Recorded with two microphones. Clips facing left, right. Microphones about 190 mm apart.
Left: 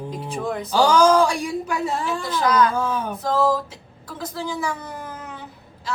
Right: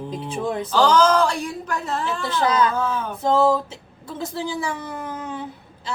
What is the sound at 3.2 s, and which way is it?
A woman's voice, 25° right (ahead or behind).